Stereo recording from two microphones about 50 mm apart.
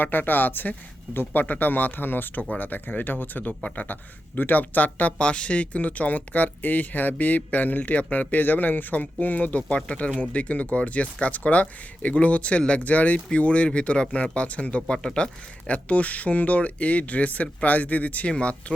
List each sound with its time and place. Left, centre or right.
0.0 s speech: left
5.1 s speech: left
14.8 s speech: centre